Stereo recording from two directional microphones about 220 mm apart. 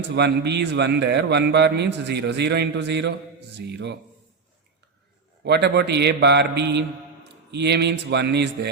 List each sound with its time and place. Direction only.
0.2 s a man's voice: 50° right (ahead or behind)
5.4 s a man's voice: 50° right (ahead or behind)